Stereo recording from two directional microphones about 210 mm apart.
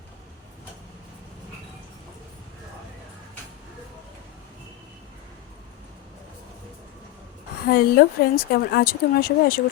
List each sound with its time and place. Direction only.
7.7 s speech: 45° left (ahead or behind)